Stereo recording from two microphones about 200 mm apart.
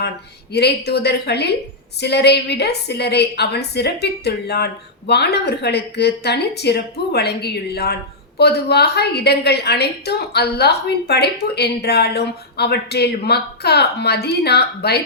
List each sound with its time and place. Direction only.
0.5 s a woman's voice: 55° left (ahead or behind)